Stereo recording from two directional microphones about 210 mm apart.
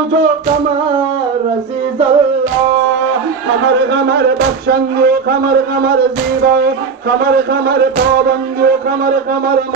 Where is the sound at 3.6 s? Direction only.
60° right (ahead or behind).